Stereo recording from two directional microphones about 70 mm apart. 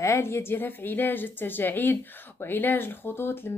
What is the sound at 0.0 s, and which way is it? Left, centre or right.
A woman's voice, left.